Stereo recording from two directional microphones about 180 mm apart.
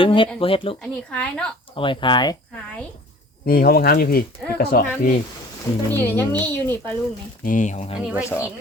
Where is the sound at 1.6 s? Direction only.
30° left (ahead or behind).